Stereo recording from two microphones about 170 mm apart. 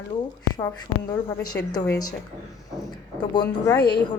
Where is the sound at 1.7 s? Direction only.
20° left (ahead or behind).